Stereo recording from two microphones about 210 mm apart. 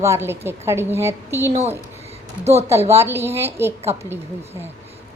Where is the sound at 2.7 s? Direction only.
15° right (ahead or behind).